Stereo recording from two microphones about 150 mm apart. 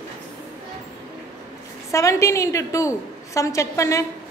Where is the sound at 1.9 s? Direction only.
20° left (ahead or behind).